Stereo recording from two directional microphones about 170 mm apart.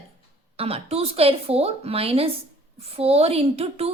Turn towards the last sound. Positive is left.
turn(degrees=-35)  # may be behind; listen again after turning